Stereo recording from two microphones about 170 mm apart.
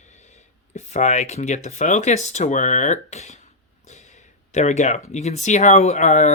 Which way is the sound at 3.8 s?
45° left (ahead or behind).